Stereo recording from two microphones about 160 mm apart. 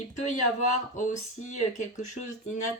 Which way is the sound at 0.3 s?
45° left (ahead or behind).